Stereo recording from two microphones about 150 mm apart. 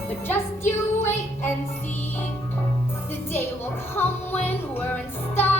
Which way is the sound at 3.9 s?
15° left (ahead or behind).